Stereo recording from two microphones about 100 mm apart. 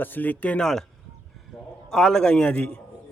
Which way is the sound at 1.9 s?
5° left (ahead or behind).